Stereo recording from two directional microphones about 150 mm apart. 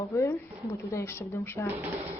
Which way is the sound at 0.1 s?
15° left (ahead or behind).